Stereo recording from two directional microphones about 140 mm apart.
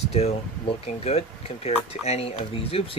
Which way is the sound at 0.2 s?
50° left (ahead or behind).